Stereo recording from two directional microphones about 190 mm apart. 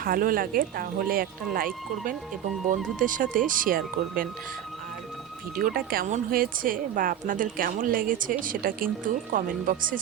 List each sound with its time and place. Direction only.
0.0 s speech: 50° right (ahead or behind)
5.5 s speech: 50° right (ahead or behind)